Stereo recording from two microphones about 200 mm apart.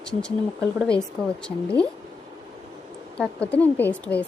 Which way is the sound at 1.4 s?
5° left (ahead or behind).